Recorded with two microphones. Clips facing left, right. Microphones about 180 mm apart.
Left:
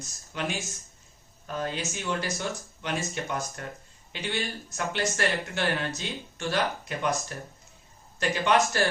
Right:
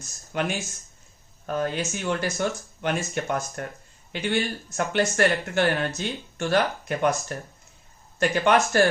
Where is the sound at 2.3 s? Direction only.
55° right (ahead or behind).